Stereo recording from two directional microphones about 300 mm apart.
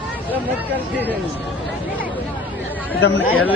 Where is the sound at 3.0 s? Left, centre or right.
Left.